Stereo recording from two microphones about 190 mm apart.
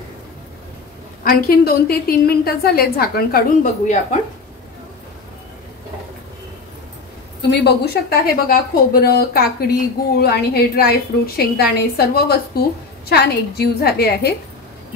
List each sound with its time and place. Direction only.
1.2 s a woman's voice: 50° left (ahead or behind)
7.6 s a woman's voice: 55° left (ahead or behind)